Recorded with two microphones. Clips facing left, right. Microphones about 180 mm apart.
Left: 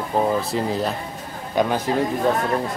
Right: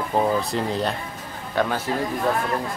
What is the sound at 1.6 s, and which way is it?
Speech, 15° left (ahead or behind).